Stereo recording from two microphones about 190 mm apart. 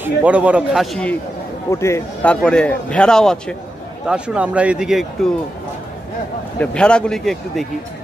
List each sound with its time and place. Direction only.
0.0 s speech: 5° right (ahead or behind)
1.7 s a man's voice: 15° left (ahead or behind); by 5.3 s centre (ahead or behind)
6.6 s a man's voice: 5° left (ahead or behind)